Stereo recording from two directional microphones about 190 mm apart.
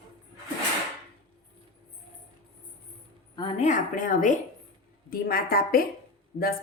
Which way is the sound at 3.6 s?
40° left (ahead or behind).